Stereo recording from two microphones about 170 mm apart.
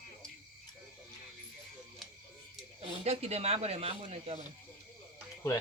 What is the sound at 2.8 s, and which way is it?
A man's voice, 35° right (ahead or behind).